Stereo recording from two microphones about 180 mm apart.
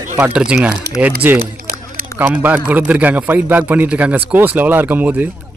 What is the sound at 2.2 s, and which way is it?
Speech, 10° right (ahead or behind).